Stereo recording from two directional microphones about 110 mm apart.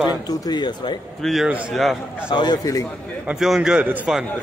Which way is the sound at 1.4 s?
10° right (ahead or behind).